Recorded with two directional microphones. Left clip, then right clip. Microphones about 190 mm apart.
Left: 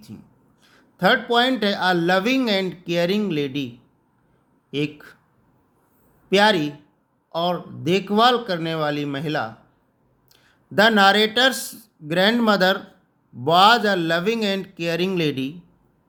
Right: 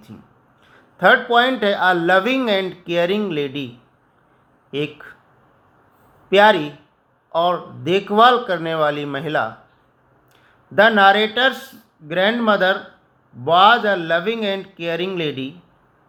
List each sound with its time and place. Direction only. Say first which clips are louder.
0.1 s speech: right 1 dB; 20° left (ahead or behind)
4.7 s speech: right 2 dB; 20° left (ahead or behind)
6.3 s speech: right 4 dB; 20° left (ahead or behind)
10.8 s a man's voice: right 3 dB; 30° left (ahead or behind)